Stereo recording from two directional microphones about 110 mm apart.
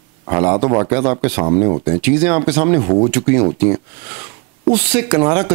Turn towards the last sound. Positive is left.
turn(degrees=-15)  # may be behind; listen again after turning